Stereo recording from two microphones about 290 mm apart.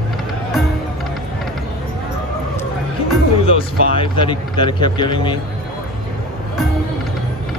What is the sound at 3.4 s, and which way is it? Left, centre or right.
Speech, centre.